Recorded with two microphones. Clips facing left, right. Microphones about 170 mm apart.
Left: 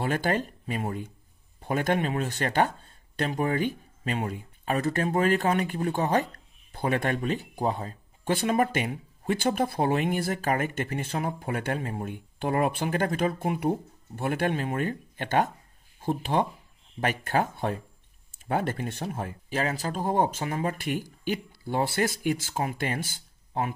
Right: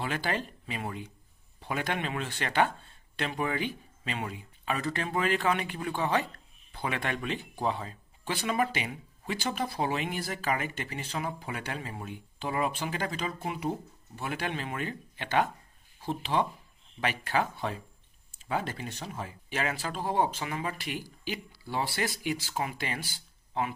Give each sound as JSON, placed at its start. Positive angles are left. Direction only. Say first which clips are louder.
{"t": 0.0, "sound": "speech", "louder": "left 5 dB", "side_deg": 45}
{"t": 19.5, "sound": "speech", "louder": "left 4 dB", "side_deg": 40}